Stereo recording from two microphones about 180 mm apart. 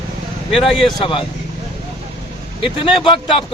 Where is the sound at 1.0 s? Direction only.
30° left (ahead or behind).